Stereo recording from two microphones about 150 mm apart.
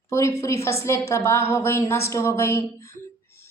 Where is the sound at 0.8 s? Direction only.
20° left (ahead or behind).